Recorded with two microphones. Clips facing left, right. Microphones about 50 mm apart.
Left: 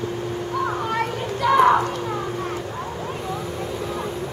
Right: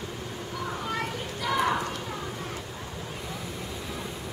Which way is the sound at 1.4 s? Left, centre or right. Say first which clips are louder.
Left 11 dB; left.